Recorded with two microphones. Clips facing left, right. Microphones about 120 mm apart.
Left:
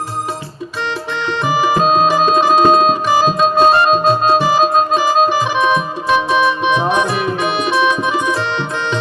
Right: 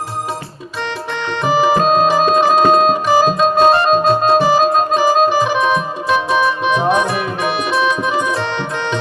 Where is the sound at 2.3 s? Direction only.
30° left (ahead or behind).